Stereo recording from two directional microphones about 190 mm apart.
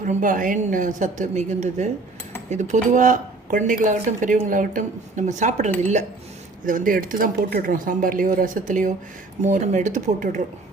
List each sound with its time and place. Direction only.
0.0 s a woman's voice: 45° right (ahead or behind)